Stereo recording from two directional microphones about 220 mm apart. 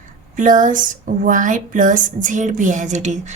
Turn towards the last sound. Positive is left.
turn(degrees=-35)  # may be behind; listen again after turning